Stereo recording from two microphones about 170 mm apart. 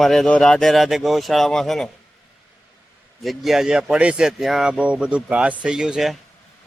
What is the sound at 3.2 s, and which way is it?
Speech, centre (ahead or behind).